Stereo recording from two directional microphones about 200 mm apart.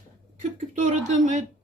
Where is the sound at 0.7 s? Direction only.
40° right (ahead or behind).